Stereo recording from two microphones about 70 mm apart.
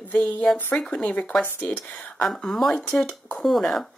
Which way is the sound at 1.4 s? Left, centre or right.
Left.